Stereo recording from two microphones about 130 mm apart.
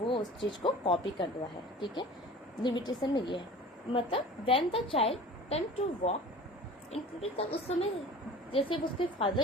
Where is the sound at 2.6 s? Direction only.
35° left (ahead or behind); by 5.6 s 50° left (ahead or behind).